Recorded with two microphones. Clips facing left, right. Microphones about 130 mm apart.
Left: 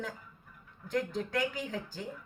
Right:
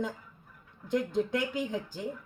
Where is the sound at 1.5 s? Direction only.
20° right (ahead or behind).